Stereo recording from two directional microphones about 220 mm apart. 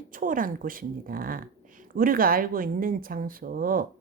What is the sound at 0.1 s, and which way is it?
A woman's voice, 40° right (ahead or behind).